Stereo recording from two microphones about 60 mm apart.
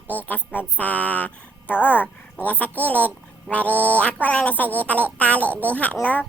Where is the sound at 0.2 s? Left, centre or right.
Left.